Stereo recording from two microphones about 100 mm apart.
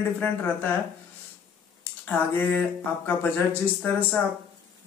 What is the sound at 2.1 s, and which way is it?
Speech, 15° left (ahead or behind).